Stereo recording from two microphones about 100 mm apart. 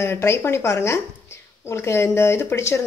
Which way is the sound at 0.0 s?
25° left (ahead or behind).